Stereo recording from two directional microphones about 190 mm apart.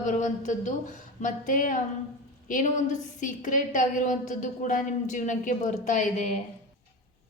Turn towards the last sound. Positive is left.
turn(degrees=40)  # may be behind; listen again after turning